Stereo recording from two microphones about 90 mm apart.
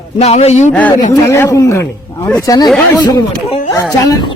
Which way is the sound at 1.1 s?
30° left (ahead or behind).